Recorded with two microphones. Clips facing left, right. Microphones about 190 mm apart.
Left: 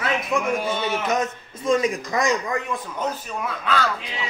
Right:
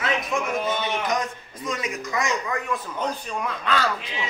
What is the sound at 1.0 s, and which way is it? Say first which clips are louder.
Speech: left 3 dB; 25° left (ahead or behind).